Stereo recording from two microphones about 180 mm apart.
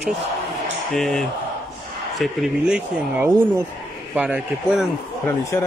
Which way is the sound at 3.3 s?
15° right (ahead or behind).